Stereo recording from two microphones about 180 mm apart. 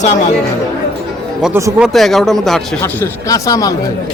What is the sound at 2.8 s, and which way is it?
Speech, 20° left (ahead or behind).